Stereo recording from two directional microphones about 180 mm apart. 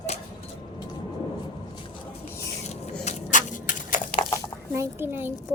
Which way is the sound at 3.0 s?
45° left (ahead or behind).